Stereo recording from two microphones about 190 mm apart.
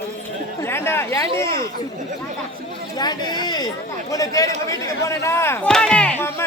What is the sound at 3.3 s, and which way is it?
Speech, 20° left (ahead or behind).